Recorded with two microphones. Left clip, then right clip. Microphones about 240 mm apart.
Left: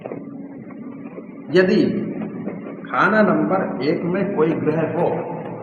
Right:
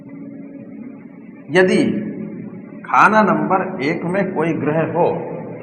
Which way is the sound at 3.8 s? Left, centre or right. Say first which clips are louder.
Right 1 dB; right.